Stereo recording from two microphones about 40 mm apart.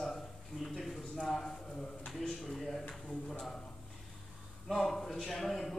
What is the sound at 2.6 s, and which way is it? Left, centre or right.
Speech, centre.